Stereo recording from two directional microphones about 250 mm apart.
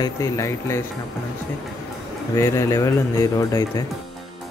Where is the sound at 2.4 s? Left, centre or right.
Centre.